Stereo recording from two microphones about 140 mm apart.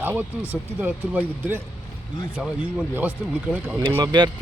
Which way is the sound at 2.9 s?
10° right (ahead or behind).